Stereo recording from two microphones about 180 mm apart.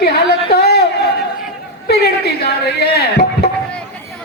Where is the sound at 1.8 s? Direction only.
65° left (ahead or behind).